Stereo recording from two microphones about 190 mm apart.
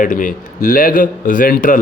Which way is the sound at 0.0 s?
45° left (ahead or behind).